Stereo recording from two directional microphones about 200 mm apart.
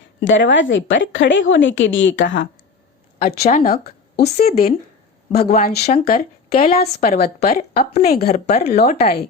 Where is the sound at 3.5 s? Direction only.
40° left (ahead or behind).